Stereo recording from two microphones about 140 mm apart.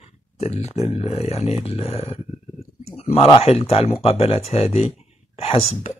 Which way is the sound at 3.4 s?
45° left (ahead or behind).